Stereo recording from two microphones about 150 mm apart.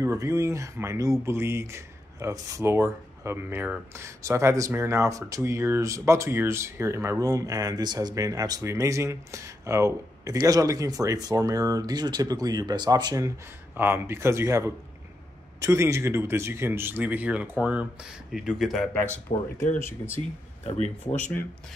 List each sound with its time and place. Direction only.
0.0 s speech: 20° right (ahead or behind)
13.7 s speech: 15° right (ahead or behind)
19.3 s speech: 55° left (ahead or behind)
19.8 s speech: 15° left (ahead or behind)
21.2 s speech: 10° left (ahead or behind)